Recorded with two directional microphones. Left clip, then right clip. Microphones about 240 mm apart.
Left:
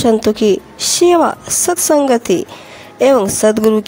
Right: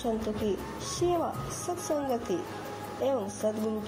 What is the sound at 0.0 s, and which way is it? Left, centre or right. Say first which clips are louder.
A woman's voice: left 19 dB; left.